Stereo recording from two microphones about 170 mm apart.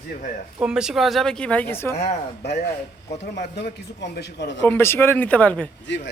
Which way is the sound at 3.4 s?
75° left (ahead or behind).